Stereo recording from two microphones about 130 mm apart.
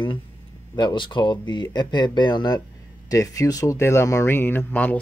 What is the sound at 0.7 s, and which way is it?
Speech, 35° left (ahead or behind).